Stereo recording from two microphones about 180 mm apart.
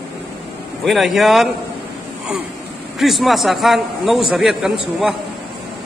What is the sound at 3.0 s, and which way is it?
Speech, centre (ahead or behind).